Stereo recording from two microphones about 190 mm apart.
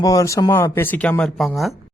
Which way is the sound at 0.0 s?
20° left (ahead or behind).